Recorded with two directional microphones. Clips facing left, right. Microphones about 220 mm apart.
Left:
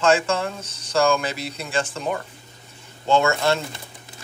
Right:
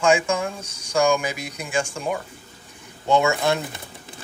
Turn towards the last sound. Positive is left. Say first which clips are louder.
# even
turn(degrees=-15)  # may be behind; listen again after turning